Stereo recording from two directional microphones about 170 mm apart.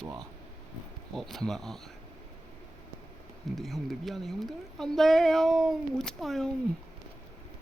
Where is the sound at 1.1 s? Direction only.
Centre (ahead or behind).